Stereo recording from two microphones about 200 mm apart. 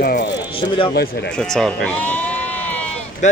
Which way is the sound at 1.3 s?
5° left (ahead or behind).